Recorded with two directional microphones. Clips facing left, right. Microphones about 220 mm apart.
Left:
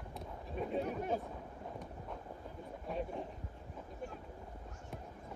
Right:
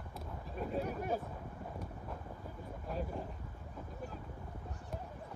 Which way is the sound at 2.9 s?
Centre (ahead or behind).